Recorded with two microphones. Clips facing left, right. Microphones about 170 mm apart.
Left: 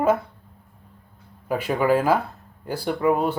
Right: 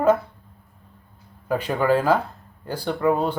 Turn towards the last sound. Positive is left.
turn(degrees=5)  # may be behind; listen again after turning